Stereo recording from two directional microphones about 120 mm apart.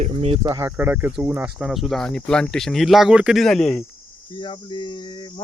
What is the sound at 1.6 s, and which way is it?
Speech, centre (ahead or behind).